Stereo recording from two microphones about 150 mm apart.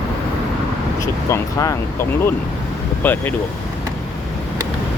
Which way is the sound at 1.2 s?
20° left (ahead or behind).